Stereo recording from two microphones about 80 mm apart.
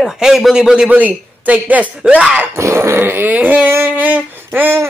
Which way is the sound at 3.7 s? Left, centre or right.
Right.